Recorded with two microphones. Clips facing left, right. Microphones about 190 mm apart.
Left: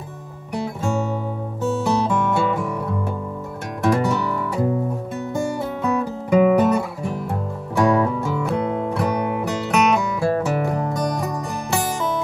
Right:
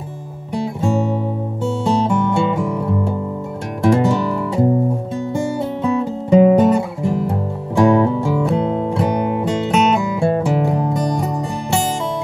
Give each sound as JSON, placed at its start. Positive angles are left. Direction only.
{"t": 1.9, "sound": "music", "side_deg": -25}